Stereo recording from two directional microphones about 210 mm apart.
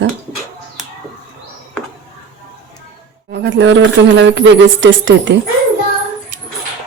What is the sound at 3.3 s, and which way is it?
Speech, 55° right (ahead or behind).